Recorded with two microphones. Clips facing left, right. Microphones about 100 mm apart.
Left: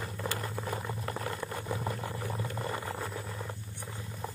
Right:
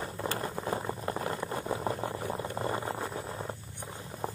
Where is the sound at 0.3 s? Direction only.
30° right (ahead or behind).